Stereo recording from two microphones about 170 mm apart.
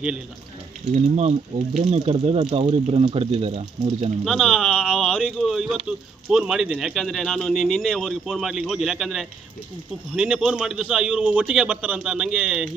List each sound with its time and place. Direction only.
0.9 s speech: 40° right (ahead or behind)
4.2 s speech: centre (ahead or behind)